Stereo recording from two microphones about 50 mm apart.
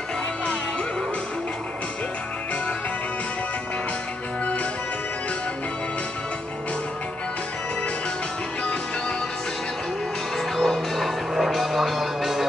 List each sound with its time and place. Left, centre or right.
10.5 s music: centre